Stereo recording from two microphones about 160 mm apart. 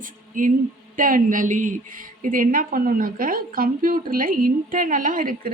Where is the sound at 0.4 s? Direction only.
55° right (ahead or behind).